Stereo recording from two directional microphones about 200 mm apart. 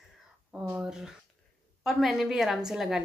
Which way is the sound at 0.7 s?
5° right (ahead or behind).